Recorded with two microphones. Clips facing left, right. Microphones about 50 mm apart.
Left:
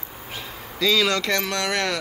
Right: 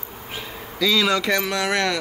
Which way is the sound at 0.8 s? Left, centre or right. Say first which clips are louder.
Right 1 dB; centre.